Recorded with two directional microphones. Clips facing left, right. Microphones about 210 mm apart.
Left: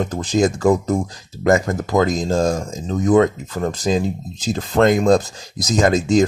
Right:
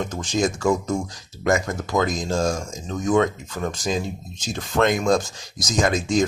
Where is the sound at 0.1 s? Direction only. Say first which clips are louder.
Left 5 dB; 35° left (ahead or behind).